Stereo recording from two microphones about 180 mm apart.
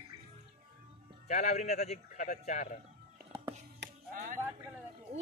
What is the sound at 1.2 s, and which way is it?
A man's voice, 40° left (ahead or behind).